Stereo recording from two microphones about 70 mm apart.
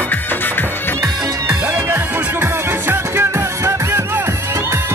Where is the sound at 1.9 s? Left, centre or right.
Right.